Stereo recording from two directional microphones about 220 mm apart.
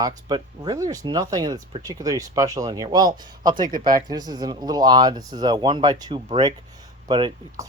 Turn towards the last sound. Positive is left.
turn(degrees=-20)  # may be behind; listen again after turning